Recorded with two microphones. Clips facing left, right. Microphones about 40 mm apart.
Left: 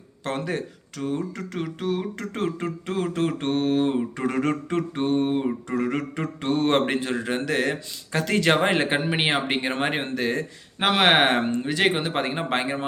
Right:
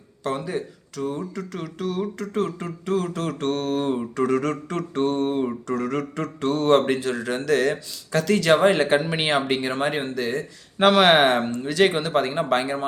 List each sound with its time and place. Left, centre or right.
0.3 s speech: left
1.0 s a sound: left
2.2 s speech: left
10.8 s speech: centre
11.3 s speech: left